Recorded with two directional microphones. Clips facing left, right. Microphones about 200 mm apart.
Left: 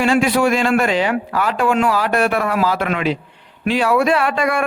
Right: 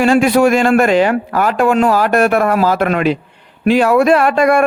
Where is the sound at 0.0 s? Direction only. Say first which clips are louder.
Right 5 dB; 45° right (ahead or behind).